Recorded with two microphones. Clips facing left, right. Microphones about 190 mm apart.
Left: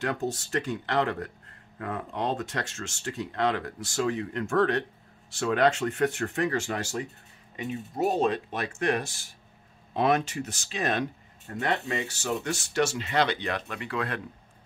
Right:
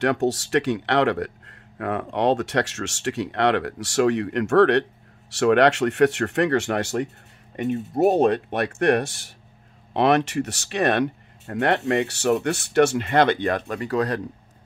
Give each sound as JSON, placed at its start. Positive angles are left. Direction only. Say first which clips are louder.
{"t": 0.0, "sound": "speech", "louder": "right 8 dB", "side_deg": -70}